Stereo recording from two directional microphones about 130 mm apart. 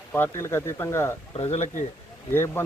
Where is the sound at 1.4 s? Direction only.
50° left (ahead or behind).